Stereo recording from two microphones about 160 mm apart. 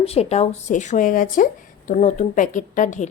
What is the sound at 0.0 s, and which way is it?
A woman's voice, 40° left (ahead or behind).